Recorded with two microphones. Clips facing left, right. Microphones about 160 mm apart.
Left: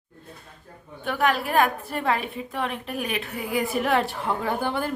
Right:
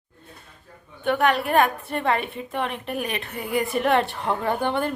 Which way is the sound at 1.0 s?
Centre (ahead or behind).